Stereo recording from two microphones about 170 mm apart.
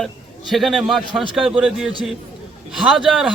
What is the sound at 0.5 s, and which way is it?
A man's voice, centre (ahead or behind).